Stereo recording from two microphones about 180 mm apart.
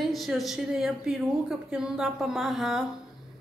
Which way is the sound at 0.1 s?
Centre (ahead or behind).